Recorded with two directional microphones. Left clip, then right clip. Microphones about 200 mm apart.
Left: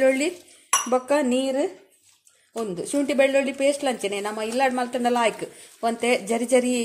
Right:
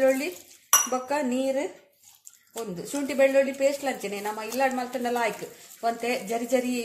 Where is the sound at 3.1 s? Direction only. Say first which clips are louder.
Even; 50° left (ahead or behind).